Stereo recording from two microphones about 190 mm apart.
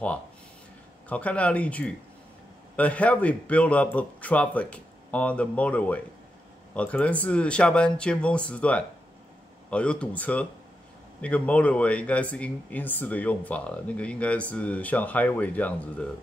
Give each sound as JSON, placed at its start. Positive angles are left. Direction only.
{"t": 1.0, "sound": "speech", "side_deg": 5}